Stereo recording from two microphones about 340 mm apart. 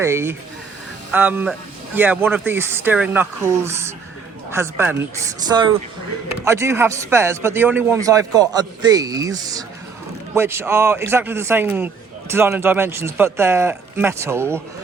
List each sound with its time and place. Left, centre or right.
0.0 s a man's voice: centre